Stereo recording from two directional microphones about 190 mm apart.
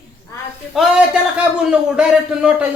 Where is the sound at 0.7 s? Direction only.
Centre (ahead or behind).